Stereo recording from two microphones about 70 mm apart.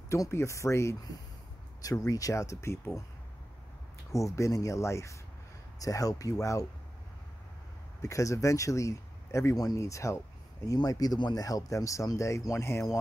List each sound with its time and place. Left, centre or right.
0.1 s speech: left
1.8 s speech: left
4.1 s speech: left
5.8 s speech: left
8.0 s speech: left
10.7 s speech: left
11.4 s speech: left